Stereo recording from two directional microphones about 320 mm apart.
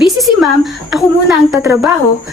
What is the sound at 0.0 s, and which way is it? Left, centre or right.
Speech, centre.